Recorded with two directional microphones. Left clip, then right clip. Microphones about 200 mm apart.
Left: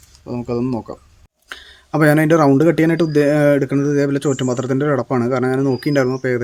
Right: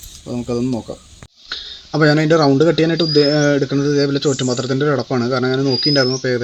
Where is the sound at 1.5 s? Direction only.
20° left (ahead or behind).